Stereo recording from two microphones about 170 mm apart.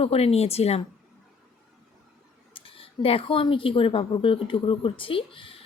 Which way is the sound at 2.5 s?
30° left (ahead or behind).